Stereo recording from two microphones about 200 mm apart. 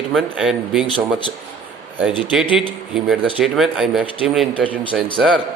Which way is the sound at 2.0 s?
5° right (ahead or behind).